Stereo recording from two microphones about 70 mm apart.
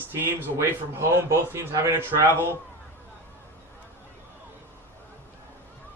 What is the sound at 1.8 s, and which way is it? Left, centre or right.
Speech, right.